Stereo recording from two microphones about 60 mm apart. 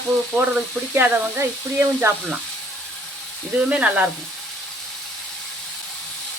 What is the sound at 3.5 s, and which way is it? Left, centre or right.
Speech, right.